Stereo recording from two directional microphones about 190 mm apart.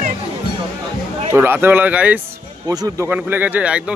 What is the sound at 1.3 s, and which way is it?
Speech, 10° right (ahead or behind).